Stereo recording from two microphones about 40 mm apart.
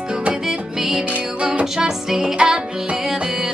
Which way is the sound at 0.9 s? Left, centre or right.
Right.